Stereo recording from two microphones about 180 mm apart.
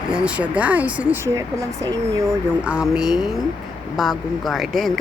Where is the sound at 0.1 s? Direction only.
5° right (ahead or behind).